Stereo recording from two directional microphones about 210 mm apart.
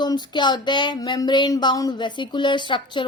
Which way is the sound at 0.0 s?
20° left (ahead or behind).